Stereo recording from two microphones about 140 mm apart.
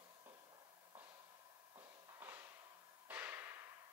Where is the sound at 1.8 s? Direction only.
15° right (ahead or behind).